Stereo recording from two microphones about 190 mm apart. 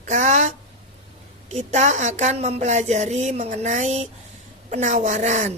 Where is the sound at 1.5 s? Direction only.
40° right (ahead or behind).